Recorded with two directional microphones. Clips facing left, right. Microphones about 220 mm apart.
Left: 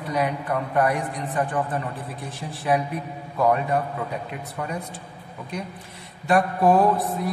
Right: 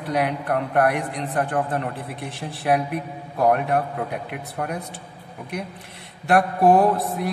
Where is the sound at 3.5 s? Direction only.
65° right (ahead or behind).